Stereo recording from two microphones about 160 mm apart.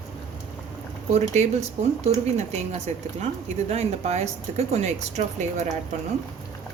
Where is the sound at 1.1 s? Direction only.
45° right (ahead or behind).